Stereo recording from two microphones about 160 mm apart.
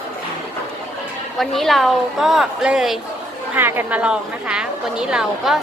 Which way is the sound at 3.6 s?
15° right (ahead or behind).